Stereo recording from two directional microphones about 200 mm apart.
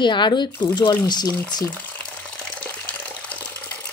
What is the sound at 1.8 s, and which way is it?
Water, 5° left (ahead or behind).